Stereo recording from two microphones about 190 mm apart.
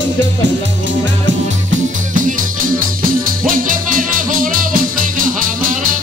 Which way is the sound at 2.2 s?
45° right (ahead or behind).